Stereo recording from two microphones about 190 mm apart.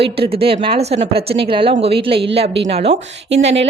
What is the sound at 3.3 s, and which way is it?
Speech, 70° right (ahead or behind).